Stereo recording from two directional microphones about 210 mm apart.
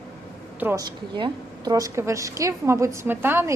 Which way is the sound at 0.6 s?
10° right (ahead or behind).